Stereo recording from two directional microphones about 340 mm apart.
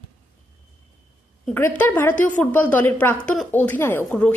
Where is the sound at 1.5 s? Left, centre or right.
Centre.